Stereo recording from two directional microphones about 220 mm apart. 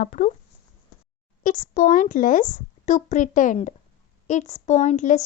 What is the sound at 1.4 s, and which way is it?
A woman's voice, 35° left (ahead or behind).